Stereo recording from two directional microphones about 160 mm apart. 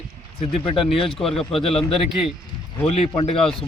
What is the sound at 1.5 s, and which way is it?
Speech, 35° left (ahead or behind).